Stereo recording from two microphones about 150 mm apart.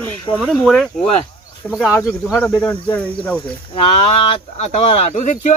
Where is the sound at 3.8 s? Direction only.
40° left (ahead or behind).